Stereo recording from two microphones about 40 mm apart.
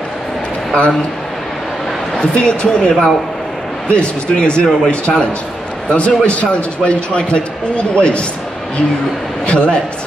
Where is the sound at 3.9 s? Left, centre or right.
Left.